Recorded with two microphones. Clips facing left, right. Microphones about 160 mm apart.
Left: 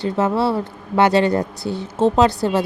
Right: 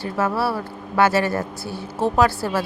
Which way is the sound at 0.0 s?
20° left (ahead or behind).